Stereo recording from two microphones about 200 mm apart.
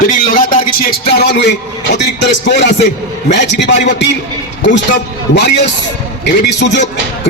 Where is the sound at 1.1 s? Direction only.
55° left (ahead or behind).